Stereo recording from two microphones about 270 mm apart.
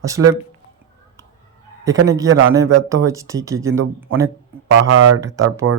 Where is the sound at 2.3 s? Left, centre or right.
Right.